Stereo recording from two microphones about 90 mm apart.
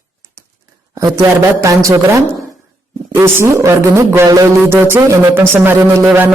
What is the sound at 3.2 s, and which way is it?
A woman's voice, 30° right (ahead or behind).